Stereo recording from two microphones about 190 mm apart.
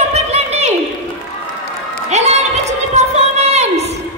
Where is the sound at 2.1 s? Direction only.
35° right (ahead or behind).